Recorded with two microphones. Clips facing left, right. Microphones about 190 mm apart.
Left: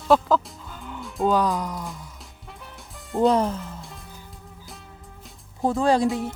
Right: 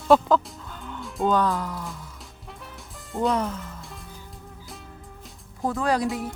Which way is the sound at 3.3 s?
30° left (ahead or behind).